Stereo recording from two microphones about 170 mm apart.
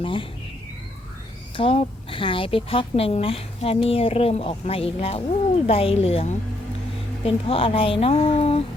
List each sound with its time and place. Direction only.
0.0 s a woman's voice: 30° left (ahead or behind)
1.5 s a woman's voice: 30° left (ahead or behind)